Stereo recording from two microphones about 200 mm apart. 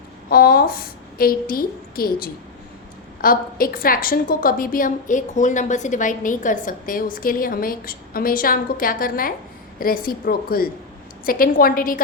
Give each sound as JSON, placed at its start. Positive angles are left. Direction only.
{"t": 0.3, "sound": "a woman's voice", "side_deg": 50}